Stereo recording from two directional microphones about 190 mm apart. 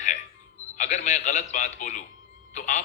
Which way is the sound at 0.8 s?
40° left (ahead or behind).